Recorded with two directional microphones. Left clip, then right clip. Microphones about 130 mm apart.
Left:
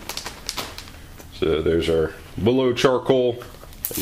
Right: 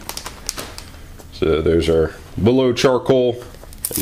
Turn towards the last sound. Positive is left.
turn(degrees=-25)  # may be behind; listen again after turning